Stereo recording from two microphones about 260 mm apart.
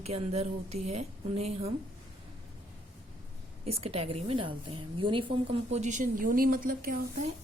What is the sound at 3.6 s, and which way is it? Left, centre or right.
A woman's voice, right.